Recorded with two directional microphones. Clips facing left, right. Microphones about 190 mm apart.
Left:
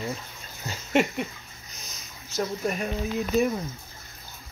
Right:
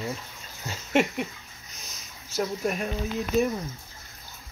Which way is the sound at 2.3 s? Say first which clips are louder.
Even; 5° right (ahead or behind).